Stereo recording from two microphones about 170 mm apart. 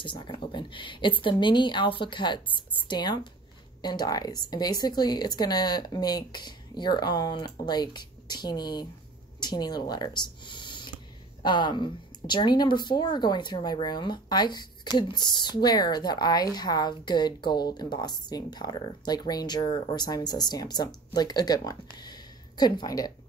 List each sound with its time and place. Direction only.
0.0 s speech: 30° left (ahead or behind)